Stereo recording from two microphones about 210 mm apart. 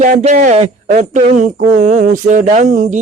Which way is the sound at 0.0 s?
35° right (ahead or behind).